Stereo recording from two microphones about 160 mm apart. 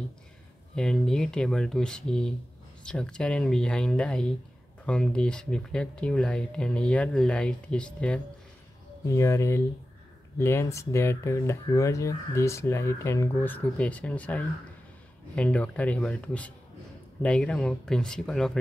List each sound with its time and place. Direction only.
0.7 s speech: 5° left (ahead or behind)
9.0 s speech: 20° left (ahead or behind); by 18.6 s 5° left (ahead or behind)